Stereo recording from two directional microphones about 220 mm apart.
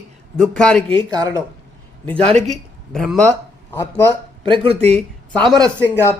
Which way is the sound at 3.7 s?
10° left (ahead or behind).